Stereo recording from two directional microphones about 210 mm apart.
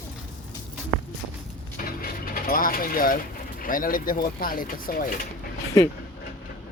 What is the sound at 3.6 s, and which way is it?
Speech, 40° left (ahead or behind).